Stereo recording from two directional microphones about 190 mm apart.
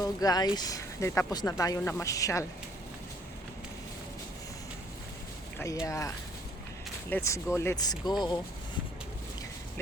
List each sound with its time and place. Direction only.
0.0 s speech: 20° left (ahead or behind)
5.8 s speech: 15° left (ahead or behind)